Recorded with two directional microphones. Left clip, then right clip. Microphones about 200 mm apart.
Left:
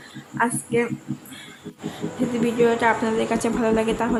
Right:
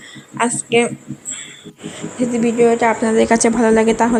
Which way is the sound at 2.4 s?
20° right (ahead or behind).